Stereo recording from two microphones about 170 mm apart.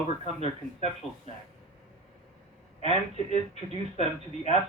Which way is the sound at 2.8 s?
40° left (ahead or behind).